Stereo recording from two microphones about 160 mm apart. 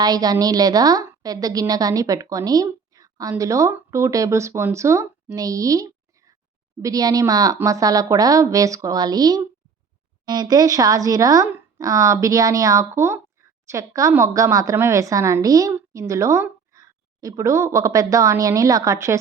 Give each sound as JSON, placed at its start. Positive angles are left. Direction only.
{"t": 0.0, "sound": "a woman's voice", "side_deg": -25}